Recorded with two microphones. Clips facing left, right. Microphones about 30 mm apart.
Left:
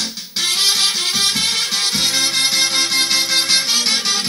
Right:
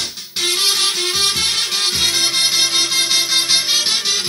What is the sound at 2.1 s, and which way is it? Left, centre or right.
Music, right.